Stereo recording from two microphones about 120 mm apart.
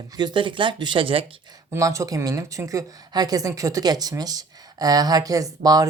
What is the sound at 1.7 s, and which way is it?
Speech, 25° right (ahead or behind).